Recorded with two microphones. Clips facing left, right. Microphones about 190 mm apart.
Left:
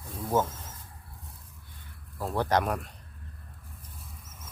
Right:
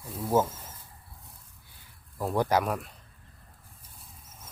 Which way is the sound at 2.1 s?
10° right (ahead or behind).